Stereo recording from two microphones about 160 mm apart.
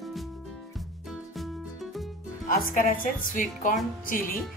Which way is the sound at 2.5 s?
60° left (ahead or behind).